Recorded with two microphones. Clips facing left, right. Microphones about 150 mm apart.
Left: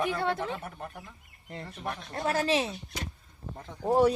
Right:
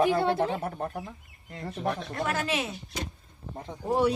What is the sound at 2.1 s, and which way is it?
Speech, 35° left (ahead or behind).